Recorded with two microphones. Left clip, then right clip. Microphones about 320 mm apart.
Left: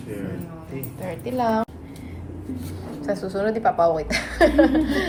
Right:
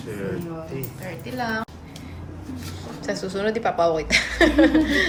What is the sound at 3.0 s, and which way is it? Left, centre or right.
A woman's voice, centre.